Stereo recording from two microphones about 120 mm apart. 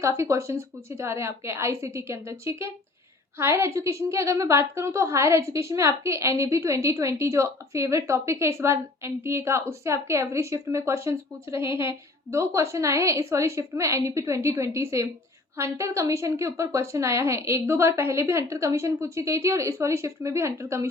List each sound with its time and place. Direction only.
0.0 s a woman's voice: 25° right (ahead or behind)